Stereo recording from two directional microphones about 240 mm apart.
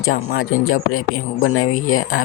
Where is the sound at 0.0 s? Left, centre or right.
Left.